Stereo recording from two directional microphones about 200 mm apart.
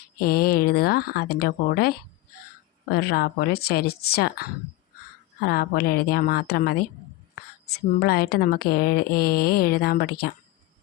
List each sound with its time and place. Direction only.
0.2 s speech: 50° left (ahead or behind)
2.9 s speech: 50° left (ahead or behind)
5.5 s speech: 50° left (ahead or behind)